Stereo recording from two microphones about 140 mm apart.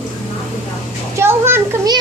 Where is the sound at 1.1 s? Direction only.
15° right (ahead or behind).